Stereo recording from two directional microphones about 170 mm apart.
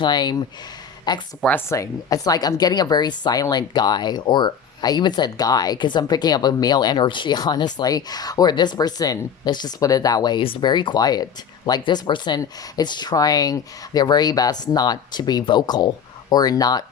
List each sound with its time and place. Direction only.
0.0 s speech: 25° left (ahead or behind)
1.4 s speech: 10° left (ahead or behind)